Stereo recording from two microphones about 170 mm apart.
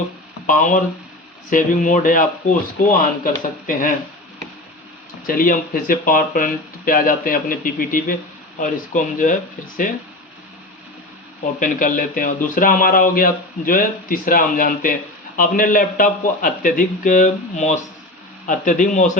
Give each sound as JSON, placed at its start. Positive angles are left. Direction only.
{"t": 0.4, "sound": "a man's voice", "side_deg": 50}
{"t": 5.2, "sound": "a man's voice", "side_deg": 55}
{"t": 11.6, "sound": "a man's voice", "side_deg": 50}